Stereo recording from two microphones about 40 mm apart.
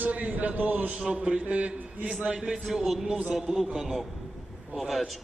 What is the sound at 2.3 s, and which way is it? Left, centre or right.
Speech, centre.